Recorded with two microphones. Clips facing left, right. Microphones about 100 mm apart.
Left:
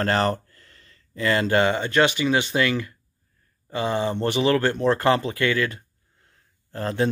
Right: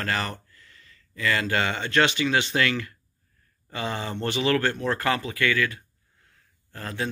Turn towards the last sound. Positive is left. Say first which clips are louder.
# left 8 dB
turn(degrees=30)  # may be behind; listen again after turning